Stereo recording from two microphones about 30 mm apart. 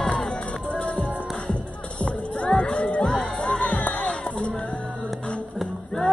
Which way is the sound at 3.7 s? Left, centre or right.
Left.